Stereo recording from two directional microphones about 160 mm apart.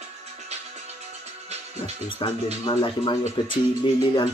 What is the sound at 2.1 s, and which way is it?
Speech, 30° left (ahead or behind).